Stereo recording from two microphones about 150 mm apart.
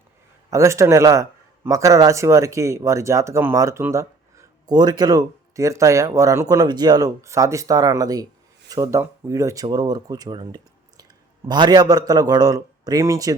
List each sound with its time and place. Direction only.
0.5 s a man's voice: 20° right (ahead or behind)